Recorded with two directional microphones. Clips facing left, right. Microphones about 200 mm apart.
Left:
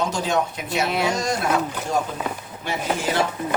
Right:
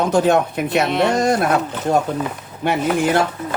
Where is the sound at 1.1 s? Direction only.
55° right (ahead or behind).